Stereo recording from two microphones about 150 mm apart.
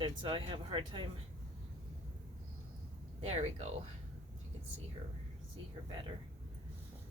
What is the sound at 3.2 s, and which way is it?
Speech, 45° right (ahead or behind).